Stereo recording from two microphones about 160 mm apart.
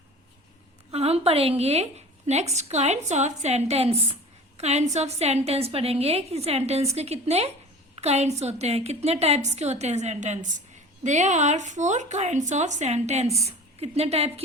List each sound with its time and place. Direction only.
0.9 s a woman's voice: 40° right (ahead or behind)